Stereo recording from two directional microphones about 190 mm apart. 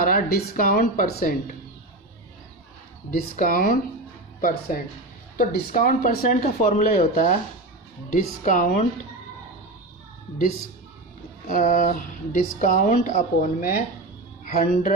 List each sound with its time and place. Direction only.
0.0 s speech: 50° left (ahead or behind)
3.1 s speech: 50° left (ahead or behind)
11.4 s speech: 45° left (ahead or behind)